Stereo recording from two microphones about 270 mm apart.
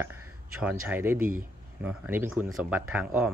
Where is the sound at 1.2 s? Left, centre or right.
Right.